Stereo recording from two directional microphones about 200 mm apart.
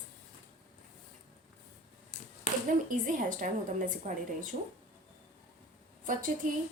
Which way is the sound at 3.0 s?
40° right (ahead or behind).